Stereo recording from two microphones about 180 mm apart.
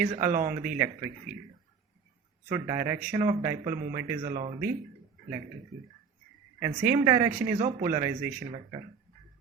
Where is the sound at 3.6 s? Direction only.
50° right (ahead or behind).